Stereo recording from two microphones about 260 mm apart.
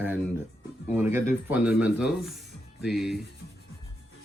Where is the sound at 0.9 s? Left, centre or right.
Centre.